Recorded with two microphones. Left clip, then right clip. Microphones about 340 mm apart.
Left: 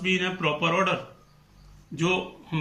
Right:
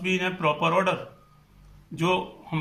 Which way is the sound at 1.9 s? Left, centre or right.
Centre.